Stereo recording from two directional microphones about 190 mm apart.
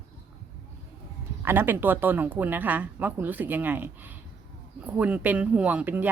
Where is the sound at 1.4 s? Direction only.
10° right (ahead or behind).